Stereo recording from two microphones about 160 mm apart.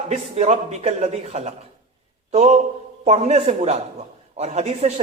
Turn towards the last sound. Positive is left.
turn(degrees=-45)  # may be behind; listen again after turning